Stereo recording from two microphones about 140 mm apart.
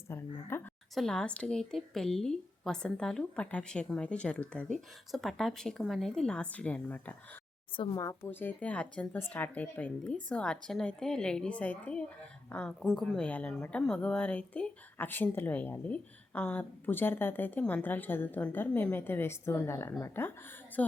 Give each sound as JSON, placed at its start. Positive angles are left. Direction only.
{"t": 0.1, "sound": "speech", "side_deg": 15}
{"t": 0.9, "sound": "a woman's voice", "side_deg": 5}
{"t": 7.8, "sound": "speech", "side_deg": 25}